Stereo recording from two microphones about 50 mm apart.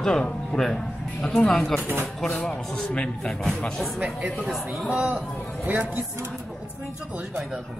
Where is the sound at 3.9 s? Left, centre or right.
Right.